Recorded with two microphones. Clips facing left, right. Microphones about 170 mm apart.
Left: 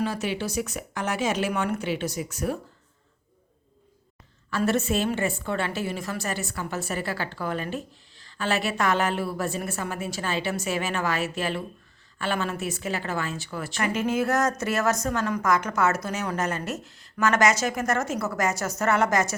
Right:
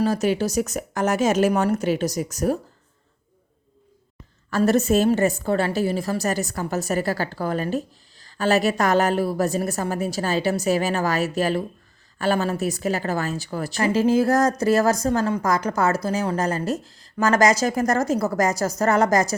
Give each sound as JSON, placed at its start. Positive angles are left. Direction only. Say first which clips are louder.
{"t": 0.0, "sound": "a woman's voice", "louder": "right 7 dB", "side_deg": -40}
{"t": 4.5, "sound": "a woman's voice", "louder": "right 6 dB", "side_deg": -40}